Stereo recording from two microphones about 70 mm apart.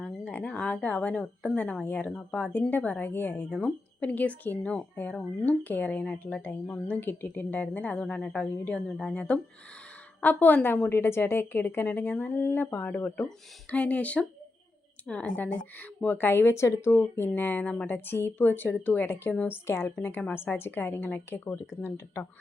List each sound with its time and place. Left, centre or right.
0.0 s a woman's voice: centre
17.8 s speech: left